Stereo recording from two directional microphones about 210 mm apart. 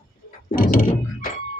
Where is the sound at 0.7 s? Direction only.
45° left (ahead or behind).